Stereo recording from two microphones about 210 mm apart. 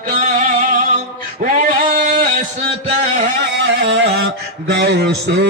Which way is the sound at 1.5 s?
40° right (ahead or behind).